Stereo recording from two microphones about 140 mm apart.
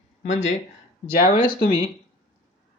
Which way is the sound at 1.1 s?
90° left.